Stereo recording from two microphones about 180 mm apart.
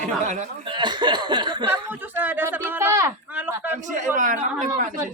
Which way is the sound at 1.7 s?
10° right (ahead or behind).